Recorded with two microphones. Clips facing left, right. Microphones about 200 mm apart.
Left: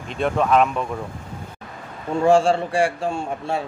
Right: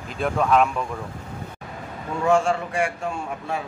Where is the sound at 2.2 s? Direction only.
30° left (ahead or behind).